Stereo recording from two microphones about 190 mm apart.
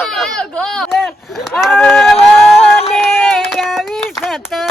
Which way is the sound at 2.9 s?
5° left (ahead or behind).